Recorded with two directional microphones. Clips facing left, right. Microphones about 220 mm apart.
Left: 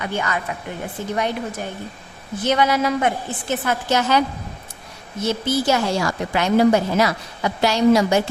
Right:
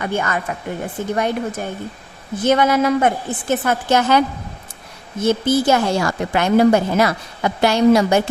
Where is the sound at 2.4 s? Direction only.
50° right (ahead or behind).